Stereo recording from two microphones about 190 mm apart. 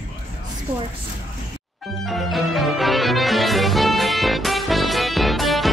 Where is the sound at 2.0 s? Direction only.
Centre (ahead or behind).